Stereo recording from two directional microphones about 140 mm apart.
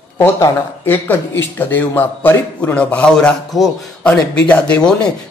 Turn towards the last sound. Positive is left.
turn(degrees=10)  # may be behind; listen again after turning